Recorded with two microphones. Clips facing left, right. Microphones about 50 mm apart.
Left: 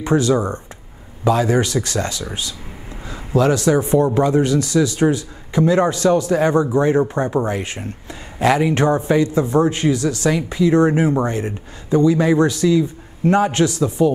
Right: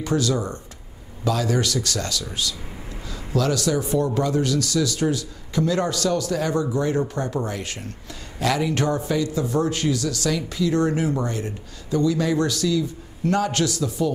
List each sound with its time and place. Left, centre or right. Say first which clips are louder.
0.0 s a man's voice: left 6 dB; left